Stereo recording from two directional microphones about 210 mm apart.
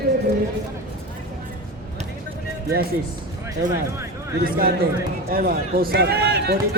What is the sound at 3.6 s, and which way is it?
A man's voice, 35° right (ahead or behind).